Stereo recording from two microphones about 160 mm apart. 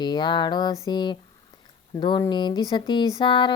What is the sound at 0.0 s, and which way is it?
Speech, 30° left (ahead or behind).